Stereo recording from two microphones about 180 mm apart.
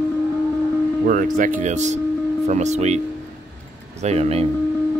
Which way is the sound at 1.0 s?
50° right (ahead or behind).